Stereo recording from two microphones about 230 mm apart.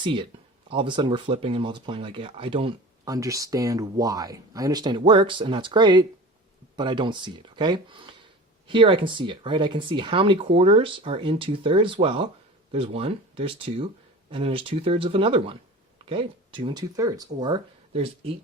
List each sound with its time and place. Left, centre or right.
0.0 s speech: right